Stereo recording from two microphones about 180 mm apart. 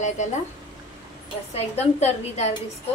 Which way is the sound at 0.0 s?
40° left (ahead or behind).